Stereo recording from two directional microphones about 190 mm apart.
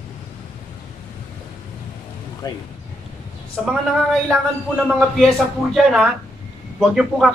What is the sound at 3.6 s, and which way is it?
A man's voice, centre (ahead or behind).